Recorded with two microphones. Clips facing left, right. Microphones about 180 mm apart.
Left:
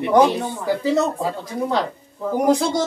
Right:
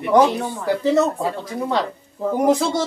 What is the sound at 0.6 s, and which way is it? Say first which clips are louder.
Speech: right 2 dB; centre (ahead or behind).